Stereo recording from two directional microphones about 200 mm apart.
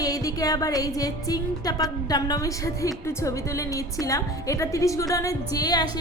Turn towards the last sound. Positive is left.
turn(degrees=20)  # may be behind; listen again after turning